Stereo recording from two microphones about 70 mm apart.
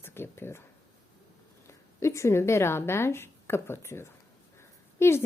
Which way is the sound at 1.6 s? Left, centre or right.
Left.